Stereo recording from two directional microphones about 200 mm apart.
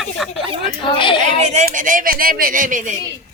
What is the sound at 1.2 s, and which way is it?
Speech, 35° right (ahead or behind).